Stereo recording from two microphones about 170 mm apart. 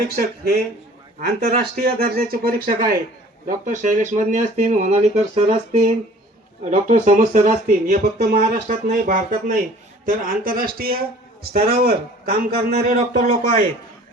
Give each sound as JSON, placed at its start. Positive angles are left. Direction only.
{"t": 0.2, "sound": "speech", "side_deg": -65}
{"t": 13.0, "sound": "speech", "side_deg": -40}